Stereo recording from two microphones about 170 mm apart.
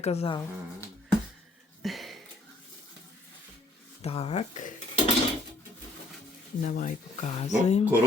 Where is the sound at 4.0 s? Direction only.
35° left (ahead or behind).